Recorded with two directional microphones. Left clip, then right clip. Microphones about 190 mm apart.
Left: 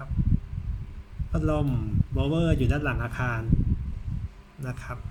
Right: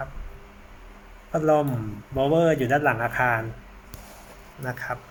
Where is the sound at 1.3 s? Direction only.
30° left (ahead or behind).